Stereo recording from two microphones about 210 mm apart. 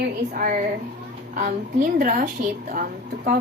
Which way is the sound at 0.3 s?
40° right (ahead or behind).